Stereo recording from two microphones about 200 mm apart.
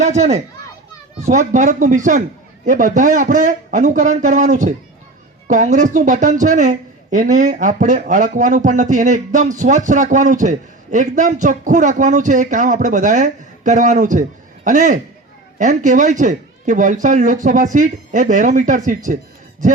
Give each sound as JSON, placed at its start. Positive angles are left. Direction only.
{"t": 0.0, "sound": "speech", "side_deg": -35}